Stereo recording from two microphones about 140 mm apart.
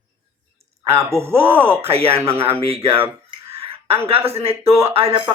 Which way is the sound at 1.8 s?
45° right (ahead or behind).